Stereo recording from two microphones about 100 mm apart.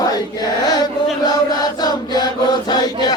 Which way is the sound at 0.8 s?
40° left (ahead or behind).